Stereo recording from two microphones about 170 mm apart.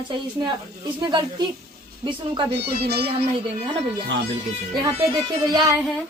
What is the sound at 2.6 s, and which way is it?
Speech, 70° right (ahead or behind).